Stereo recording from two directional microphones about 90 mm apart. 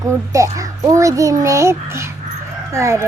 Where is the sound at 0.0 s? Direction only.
35° right (ahead or behind).